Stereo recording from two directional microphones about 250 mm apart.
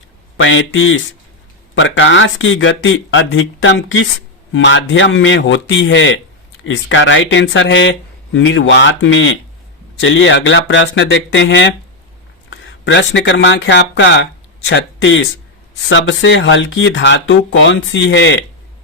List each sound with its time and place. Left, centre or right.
0.3 s speech: left